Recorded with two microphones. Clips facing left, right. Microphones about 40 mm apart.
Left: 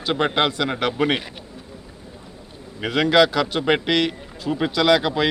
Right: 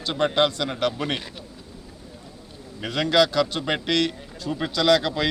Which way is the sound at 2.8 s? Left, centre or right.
Centre.